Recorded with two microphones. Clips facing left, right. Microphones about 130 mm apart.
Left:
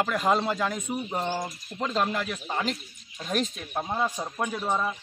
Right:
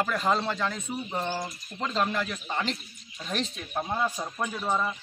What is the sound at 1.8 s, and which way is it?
Speech, 5° left (ahead or behind).